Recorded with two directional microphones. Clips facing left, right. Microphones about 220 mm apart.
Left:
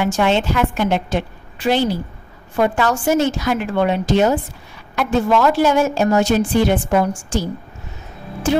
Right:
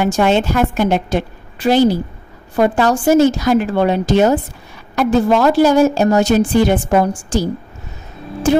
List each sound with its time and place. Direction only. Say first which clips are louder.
0.0 s a woman's voice: right 3 dB; 45° right (ahead or behind)